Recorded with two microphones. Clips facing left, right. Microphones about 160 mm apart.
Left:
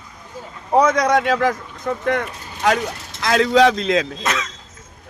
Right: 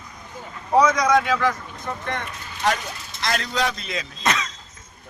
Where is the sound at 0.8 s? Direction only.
60° left (ahead or behind).